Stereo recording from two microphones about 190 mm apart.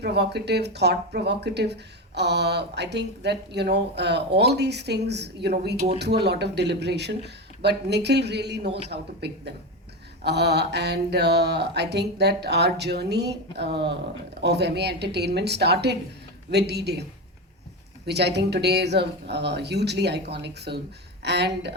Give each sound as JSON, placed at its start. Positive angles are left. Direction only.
{"t": 0.0, "sound": "speech", "side_deg": -60}
{"t": 18.0, "sound": "speech", "side_deg": -60}